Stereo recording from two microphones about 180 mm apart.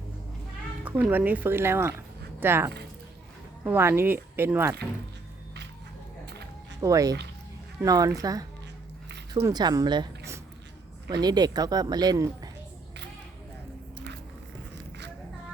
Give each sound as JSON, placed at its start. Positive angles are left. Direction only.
{"t": 0.9, "sound": "speech", "side_deg": -10}
{"t": 6.8, "sound": "speech", "side_deg": -20}